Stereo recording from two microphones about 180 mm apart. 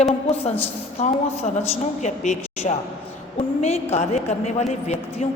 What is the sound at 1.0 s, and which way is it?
A woman's voice, 40° left (ahead or behind).